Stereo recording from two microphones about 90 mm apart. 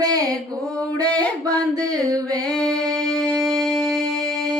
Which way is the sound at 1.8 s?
40° right (ahead or behind).